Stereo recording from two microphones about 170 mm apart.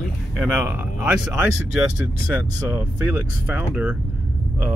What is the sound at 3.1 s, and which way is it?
Speech, 10° right (ahead or behind).